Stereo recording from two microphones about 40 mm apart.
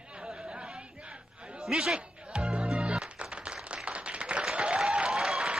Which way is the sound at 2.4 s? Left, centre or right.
Right.